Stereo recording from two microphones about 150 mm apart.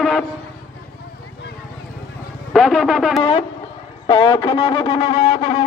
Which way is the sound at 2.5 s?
Centre (ahead or behind).